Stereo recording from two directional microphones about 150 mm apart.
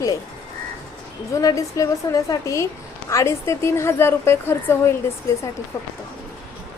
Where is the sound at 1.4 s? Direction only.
25° left (ahead or behind).